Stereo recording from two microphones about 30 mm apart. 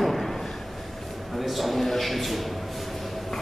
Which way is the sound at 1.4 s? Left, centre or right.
Centre.